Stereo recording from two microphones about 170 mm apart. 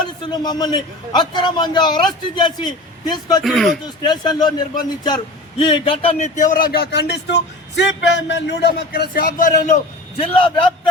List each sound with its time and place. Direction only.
0.3 s a man's voice: 25° left (ahead or behind)
3.4 s speech: centre (ahead or behind)
3.8 s a man's voice: 25° left (ahead or behind)